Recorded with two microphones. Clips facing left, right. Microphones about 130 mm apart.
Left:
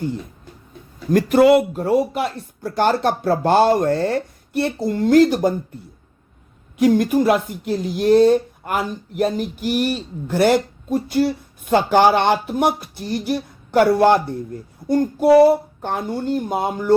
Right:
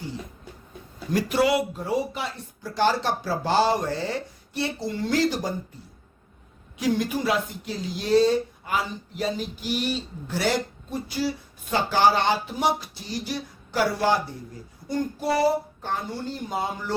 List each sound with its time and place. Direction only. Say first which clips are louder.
1.1 s speech: left 9 dB; 50° left (ahead or behind)